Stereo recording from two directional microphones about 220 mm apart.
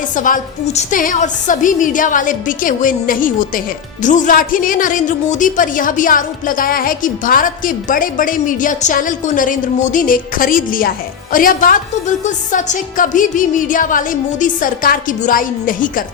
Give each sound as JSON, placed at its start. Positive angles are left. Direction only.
{"t": 0.2, "sound": "a woman's voice", "side_deg": 35}